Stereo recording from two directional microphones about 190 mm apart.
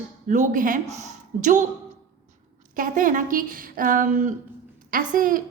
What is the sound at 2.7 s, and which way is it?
A woman's voice, 45° right (ahead or behind).